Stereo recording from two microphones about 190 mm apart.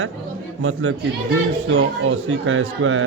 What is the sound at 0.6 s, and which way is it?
Speech, 90° right.